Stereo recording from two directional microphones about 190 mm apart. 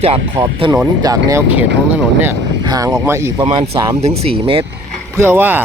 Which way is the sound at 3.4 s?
30° right (ahead or behind).